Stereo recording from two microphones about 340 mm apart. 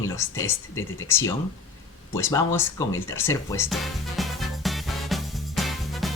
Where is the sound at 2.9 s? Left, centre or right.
Centre.